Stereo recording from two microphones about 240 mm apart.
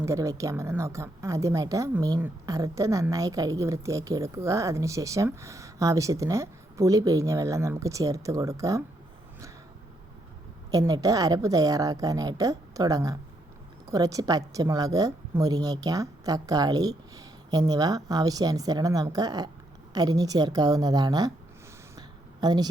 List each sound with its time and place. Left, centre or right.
0.0 s a woman's voice: centre
10.7 s a woman's voice: centre
21.9 s a sound: centre